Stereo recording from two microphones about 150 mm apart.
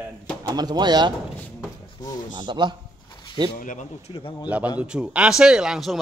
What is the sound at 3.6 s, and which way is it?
Speech, 60° left (ahead or behind).